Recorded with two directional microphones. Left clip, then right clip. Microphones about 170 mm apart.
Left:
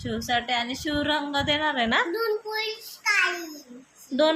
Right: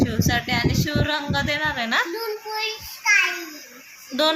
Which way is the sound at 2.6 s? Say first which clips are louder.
Right 3 dB; 15° left (ahead or behind).